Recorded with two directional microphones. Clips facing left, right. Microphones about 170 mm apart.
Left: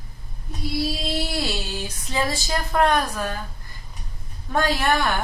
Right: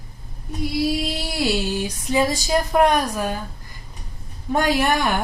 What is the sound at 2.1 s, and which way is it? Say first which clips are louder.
A woman's voice: right 5 dB; 15° right (ahead or behind).